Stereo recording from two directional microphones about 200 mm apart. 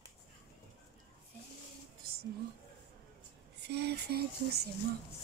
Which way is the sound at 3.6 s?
55° right (ahead or behind).